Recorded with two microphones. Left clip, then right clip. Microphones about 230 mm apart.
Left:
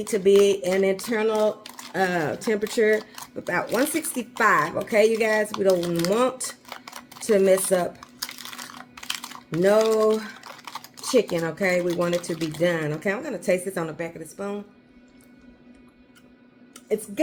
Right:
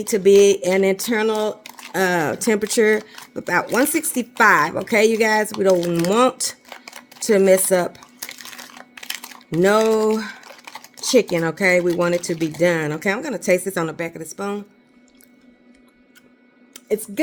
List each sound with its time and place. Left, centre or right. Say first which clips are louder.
0.1 s speech: right 5 dB; right
6.7 s a sound: right 1 dB; centre
7.2 s speech: right 4 dB; right
8.2 s a sound: even; centre
9.0 s typing: right 1 dB; centre
9.6 s speech: right 3 dB; right
10.5 s typing: even; centre
11.1 s speech: right 5 dB; right